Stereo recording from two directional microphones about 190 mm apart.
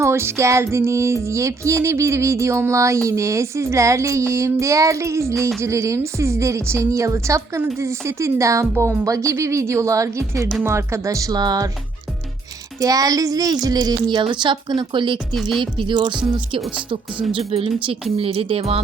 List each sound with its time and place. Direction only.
0.0 s music: 15° right (ahead or behind)
12.8 s a woman's voice: 20° right (ahead or behind)
15.4 s speech: centre (ahead or behind)
15.6 s a woman's voice: 25° right (ahead or behind)
16.6 s speech: centre (ahead or behind)
17.3 s a woman's voice: 30° right (ahead or behind)